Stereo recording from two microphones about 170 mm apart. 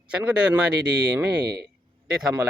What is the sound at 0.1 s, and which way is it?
Speech, 5° right (ahead or behind).